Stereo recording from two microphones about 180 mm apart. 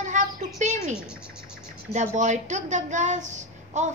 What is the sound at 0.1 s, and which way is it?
Bird, 45° right (ahead or behind).